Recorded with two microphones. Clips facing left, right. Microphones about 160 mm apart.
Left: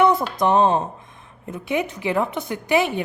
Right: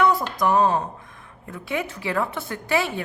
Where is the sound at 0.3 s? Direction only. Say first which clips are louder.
Left 2 dB; 25° left (ahead or behind).